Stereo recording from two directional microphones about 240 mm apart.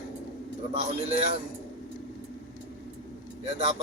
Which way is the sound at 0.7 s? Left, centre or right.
Right.